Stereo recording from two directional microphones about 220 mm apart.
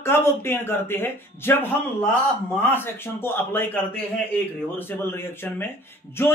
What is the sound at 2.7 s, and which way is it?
Speech, 10° left (ahead or behind).